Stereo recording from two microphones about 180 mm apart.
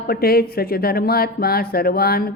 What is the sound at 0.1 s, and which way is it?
Speech, 55° left (ahead or behind).